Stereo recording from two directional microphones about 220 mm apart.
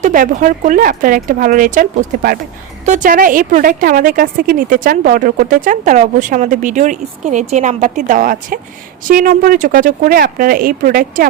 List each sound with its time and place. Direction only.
0.0 s a woman's voice: 35° right (ahead or behind)